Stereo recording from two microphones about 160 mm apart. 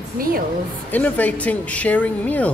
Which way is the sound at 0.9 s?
10° left (ahead or behind).